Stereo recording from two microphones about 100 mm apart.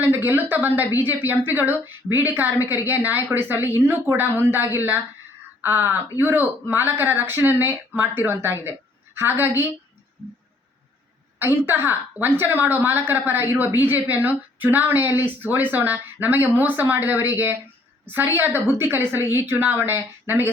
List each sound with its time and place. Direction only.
0.0 s speech: 20° right (ahead or behind)
11.3 s speech: 20° right (ahead or behind)